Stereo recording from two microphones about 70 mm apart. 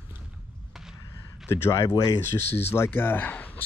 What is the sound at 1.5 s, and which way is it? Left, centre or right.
Speech, left.